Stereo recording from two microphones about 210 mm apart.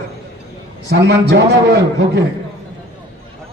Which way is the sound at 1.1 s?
55° right (ahead or behind).